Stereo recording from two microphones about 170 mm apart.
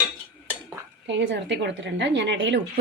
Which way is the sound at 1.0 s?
90° right.